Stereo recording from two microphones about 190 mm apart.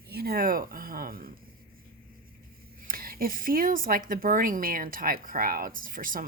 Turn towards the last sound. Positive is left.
turn(degrees=-45)  # may be behind; listen again after turning